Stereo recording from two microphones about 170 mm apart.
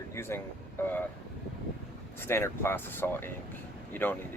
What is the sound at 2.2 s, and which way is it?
Speech, 15° left (ahead or behind).